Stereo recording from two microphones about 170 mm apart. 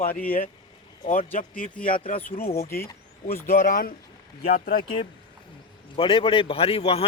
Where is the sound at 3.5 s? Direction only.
55° left (ahead or behind).